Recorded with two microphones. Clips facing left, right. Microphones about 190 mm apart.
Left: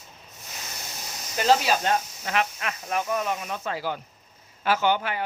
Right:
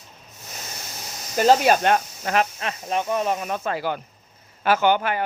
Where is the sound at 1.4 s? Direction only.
50° right (ahead or behind).